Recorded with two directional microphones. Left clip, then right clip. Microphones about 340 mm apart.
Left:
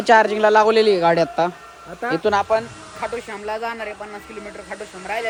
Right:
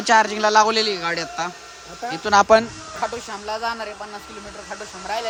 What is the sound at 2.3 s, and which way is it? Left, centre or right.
Speech, centre.